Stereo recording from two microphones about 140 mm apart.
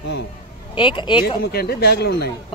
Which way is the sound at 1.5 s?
90° left.